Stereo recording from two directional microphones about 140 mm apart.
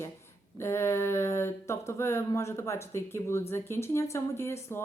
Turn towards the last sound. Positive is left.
turn(degrees=20)  # may be behind; listen again after turning